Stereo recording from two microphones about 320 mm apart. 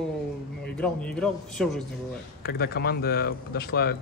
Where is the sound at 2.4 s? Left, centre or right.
Left.